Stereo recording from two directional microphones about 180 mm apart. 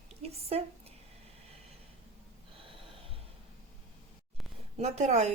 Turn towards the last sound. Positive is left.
turn(degrees=-40)  # may be behind; listen again after turning